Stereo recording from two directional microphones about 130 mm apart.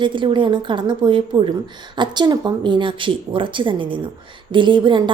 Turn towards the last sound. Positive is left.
turn(degrees=-40)  # may be behind; listen again after turning